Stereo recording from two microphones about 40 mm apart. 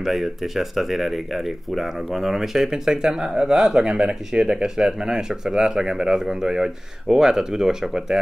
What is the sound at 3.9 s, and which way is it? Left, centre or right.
Speech, right.